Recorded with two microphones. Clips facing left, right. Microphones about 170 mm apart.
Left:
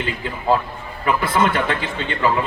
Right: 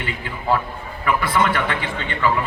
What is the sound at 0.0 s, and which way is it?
A man's voice, 25° left (ahead or behind).